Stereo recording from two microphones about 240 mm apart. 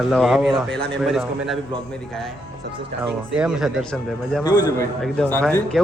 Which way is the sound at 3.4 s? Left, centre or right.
Centre.